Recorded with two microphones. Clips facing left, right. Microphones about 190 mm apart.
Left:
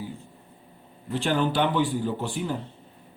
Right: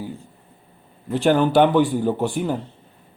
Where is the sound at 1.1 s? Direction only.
50° right (ahead or behind).